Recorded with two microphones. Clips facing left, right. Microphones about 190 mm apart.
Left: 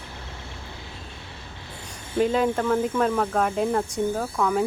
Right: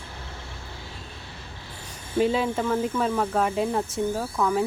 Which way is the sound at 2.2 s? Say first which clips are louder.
Left 2 dB; 5° right (ahead or behind).